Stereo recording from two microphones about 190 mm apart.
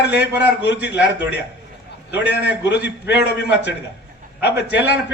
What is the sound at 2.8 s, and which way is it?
Speech, 65° left (ahead or behind).